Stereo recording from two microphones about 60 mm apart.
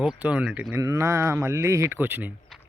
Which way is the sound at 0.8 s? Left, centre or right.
Right.